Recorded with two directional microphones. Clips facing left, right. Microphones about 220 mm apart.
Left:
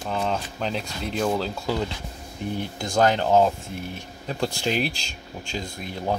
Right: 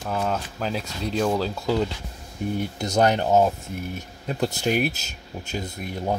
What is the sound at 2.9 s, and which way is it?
Speech, 15° right (ahead or behind).